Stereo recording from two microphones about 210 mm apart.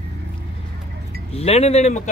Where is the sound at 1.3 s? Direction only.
30° left (ahead or behind).